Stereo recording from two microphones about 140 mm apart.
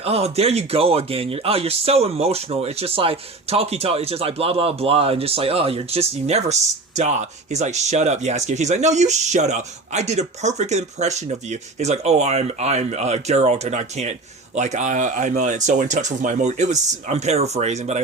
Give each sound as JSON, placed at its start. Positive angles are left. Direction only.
{"t": 0.0, "sound": "a man's voice", "side_deg": -45}